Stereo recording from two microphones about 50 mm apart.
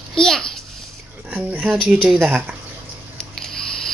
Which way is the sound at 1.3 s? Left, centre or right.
Right.